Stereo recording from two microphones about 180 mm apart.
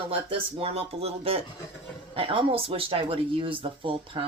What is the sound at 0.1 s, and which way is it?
Speech, 30° right (ahead or behind).